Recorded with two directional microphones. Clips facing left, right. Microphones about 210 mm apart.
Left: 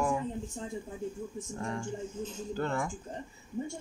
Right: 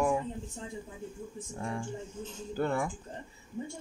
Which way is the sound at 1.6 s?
10° right (ahead or behind).